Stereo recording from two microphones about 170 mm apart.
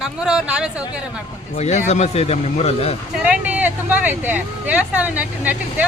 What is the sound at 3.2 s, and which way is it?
Speech, 10° right (ahead or behind).